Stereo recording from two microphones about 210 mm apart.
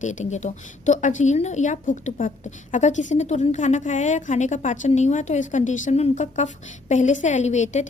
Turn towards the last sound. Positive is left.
turn(degrees=35)  # may be behind; listen again after turning